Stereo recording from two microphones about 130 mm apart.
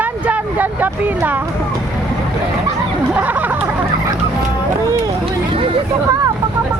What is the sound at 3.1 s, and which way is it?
Speech, 10° right (ahead or behind).